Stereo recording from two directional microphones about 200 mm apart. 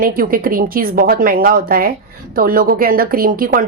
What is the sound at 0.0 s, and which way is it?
Speech, 45° right (ahead or behind).